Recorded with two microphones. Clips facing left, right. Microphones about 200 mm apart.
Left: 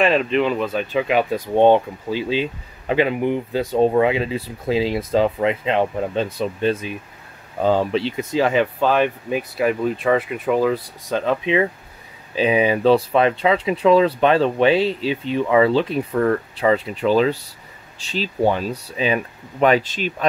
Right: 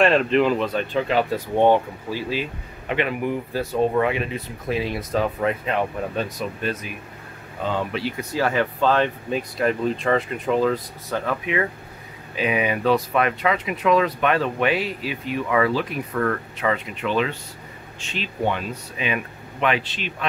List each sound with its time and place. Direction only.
0.0 s speech: centre (ahead or behind)
11.1 s speech: 25° left (ahead or behind); by 20.2 s 40° left (ahead or behind)